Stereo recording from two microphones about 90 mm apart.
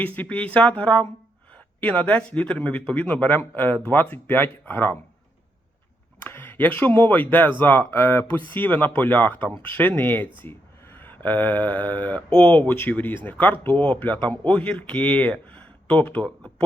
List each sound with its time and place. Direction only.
0.0 s speech: 15° left (ahead or behind)
6.2 s speech: 25° left (ahead or behind)